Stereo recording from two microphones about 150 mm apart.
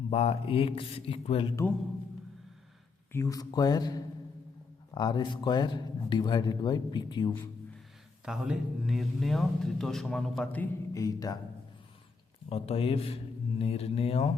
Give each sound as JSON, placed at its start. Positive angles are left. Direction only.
{"t": 0.1, "sound": "speech", "side_deg": 45}
{"t": 3.1, "sound": "speech", "side_deg": 20}
{"t": 8.2, "sound": "speech", "side_deg": -5}
{"t": 10.9, "sound": "speech", "side_deg": 25}
{"t": 12.5, "sound": "speech", "side_deg": 40}